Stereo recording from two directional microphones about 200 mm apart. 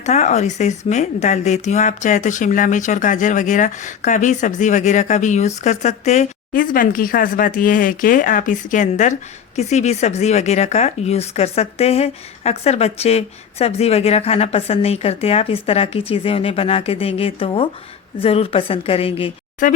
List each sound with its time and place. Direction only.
0.0 s a woman's voice: 35° left (ahead or behind)
19.6 s speech: 40° left (ahead or behind)